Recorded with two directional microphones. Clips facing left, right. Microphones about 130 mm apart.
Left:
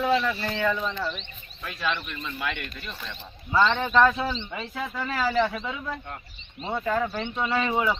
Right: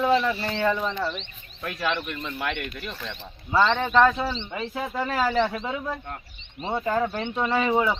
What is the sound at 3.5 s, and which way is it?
A man's voice, 25° right (ahead or behind).